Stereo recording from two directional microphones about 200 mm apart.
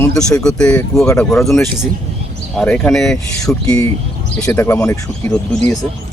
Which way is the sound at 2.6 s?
5° left (ahead or behind).